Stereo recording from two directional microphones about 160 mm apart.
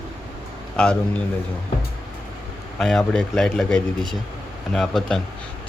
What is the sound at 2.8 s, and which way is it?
Speech, 5° left (ahead or behind).